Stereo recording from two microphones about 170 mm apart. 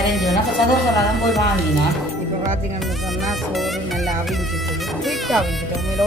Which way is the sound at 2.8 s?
Centre (ahead or behind).